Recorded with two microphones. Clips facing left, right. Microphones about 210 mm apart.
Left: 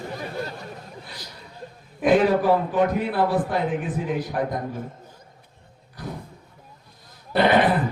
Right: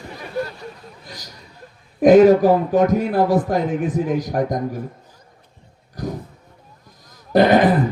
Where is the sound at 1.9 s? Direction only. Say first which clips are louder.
Right 8 dB; 40° right (ahead or behind).